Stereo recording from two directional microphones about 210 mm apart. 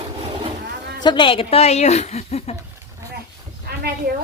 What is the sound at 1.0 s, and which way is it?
A woman's voice, 20° left (ahead or behind).